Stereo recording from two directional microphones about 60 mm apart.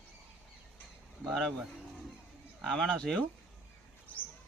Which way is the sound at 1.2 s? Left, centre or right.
Centre.